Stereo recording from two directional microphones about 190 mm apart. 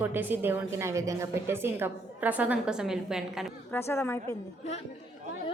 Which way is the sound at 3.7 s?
15° left (ahead or behind).